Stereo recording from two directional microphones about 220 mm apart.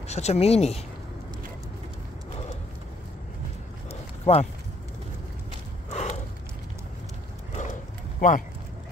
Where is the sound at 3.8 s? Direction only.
30° left (ahead or behind).